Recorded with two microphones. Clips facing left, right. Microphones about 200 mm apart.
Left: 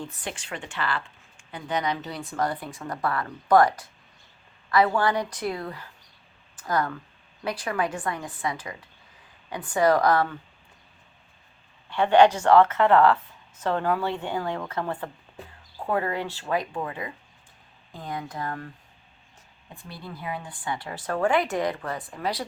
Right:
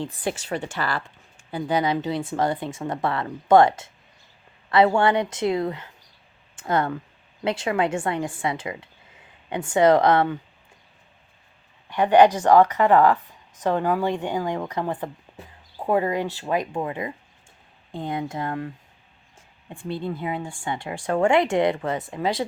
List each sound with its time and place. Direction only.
0.4 s speech: 40° right (ahead or behind); by 10.3 s 25° right (ahead or behind)
11.9 s speech: 15° right (ahead or behind)
19.9 s speech: 25° right (ahead or behind)